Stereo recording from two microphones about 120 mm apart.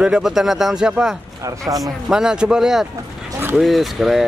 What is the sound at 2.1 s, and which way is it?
Speech, 5° right (ahead or behind).